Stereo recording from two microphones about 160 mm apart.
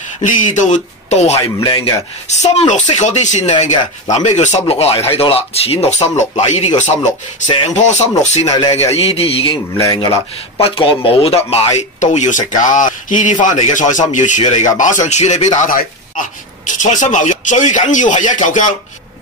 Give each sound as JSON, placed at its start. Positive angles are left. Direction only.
{"t": 0.2, "sound": "speech", "side_deg": 50}
{"t": 1.3, "sound": "speech", "side_deg": 25}
{"t": 2.2, "sound": "speech", "side_deg": 45}
{"t": 7.0, "sound": "speech", "side_deg": 25}
{"t": 7.6, "sound": "speech", "side_deg": 45}
{"t": 8.5, "sound": "speech", "side_deg": 30}
{"t": 10.6, "sound": "speech", "side_deg": 35}